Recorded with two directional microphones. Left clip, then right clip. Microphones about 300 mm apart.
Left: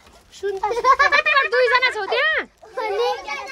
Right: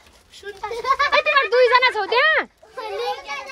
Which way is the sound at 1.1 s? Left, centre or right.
Centre.